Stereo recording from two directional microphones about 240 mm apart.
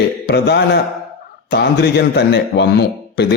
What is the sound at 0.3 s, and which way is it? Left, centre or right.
A man's voice, left.